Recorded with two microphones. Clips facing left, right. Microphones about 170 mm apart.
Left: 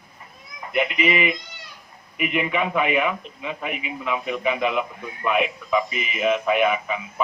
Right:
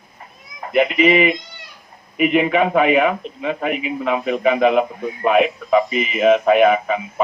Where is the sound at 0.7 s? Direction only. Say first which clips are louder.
Right 7 dB; 35° right (ahead or behind).